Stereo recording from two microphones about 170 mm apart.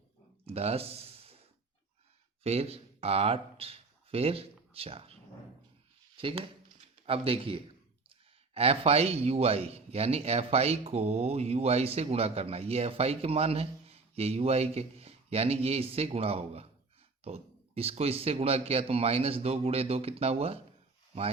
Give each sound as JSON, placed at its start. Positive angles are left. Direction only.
{"t": 0.4, "sound": "a sound", "side_deg": -35}
{"t": 2.4, "sound": "speech", "side_deg": -35}
{"t": 6.1, "sound": "speech", "side_deg": -35}